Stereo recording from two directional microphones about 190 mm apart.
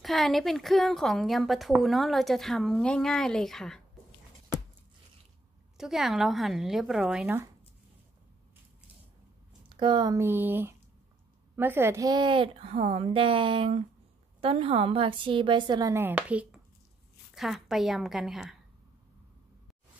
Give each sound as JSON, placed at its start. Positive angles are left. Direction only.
{"t": 0.0, "sound": "a woman's voice", "side_deg": 0}
{"t": 5.8, "sound": "a woman's voice", "side_deg": 0}
{"t": 9.7, "sound": "a woman's voice", "side_deg": -25}